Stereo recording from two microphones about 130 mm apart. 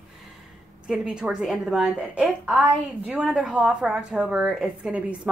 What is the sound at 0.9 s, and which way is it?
A woman's voice, 5° right (ahead or behind).